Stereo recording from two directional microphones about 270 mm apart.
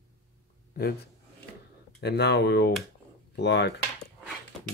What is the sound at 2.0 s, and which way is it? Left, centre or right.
Speech, left.